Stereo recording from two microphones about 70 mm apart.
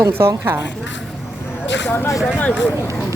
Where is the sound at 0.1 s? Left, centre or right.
Right.